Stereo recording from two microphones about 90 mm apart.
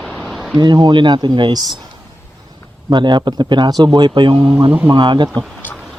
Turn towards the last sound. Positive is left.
turn(degrees=-55)  # may be behind; listen again after turning